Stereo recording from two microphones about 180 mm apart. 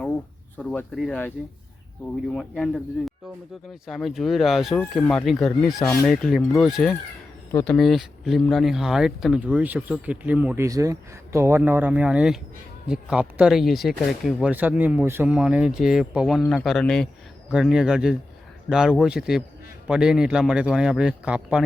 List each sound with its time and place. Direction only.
0.5 s speech: 5° left (ahead or behind)
2.3 s speech: 5° left (ahead or behind)
3.8 s speech: centre (ahead or behind)
5.8 s speech: 15° left (ahead or behind)
6.1 s speech: centre (ahead or behind)